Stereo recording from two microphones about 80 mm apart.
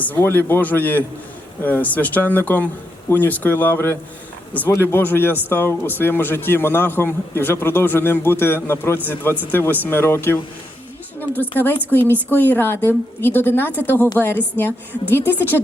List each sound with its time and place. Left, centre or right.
0.0 s speech: left